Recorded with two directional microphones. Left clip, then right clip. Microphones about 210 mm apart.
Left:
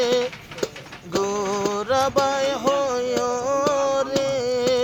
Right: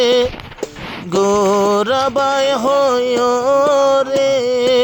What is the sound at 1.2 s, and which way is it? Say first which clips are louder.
Music: right 10 dB; 40° right (ahead or behind).